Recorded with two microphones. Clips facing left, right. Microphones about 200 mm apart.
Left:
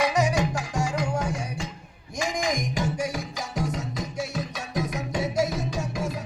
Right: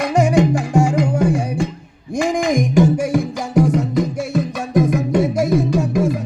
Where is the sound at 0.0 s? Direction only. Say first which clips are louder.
Right 8 dB; 50° right (ahead or behind).